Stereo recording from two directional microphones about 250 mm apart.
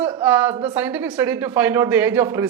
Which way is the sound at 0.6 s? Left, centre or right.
Centre.